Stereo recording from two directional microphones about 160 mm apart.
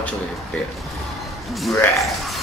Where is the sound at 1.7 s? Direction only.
20° left (ahead or behind).